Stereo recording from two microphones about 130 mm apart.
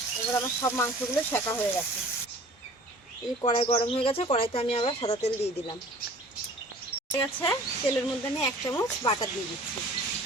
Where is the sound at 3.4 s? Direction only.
40° left (ahead or behind).